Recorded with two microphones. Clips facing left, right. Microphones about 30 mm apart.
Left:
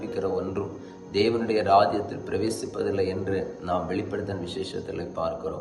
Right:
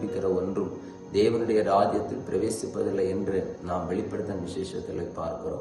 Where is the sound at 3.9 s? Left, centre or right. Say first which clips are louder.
Left 1 dB; left.